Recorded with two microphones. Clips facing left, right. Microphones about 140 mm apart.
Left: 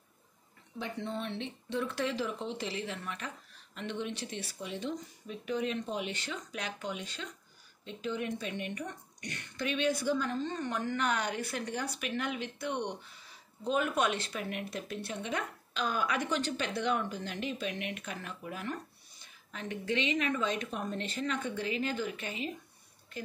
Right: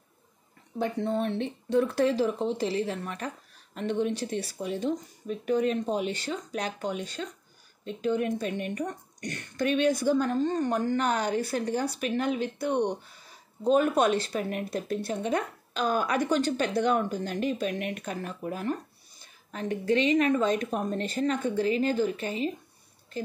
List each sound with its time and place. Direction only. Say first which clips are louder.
0.7 s speech: right 9 dB; 45° right (ahead or behind)